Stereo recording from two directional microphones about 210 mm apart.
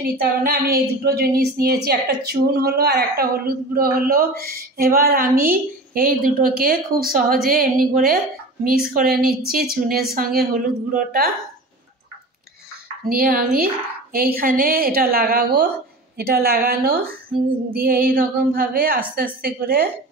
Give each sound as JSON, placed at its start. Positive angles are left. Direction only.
{"t": 0.2, "sound": "a woman's voice", "side_deg": -45}
{"t": 13.1, "sound": "a woman's voice", "side_deg": -45}